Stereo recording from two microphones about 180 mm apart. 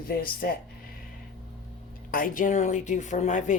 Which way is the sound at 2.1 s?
50° left (ahead or behind).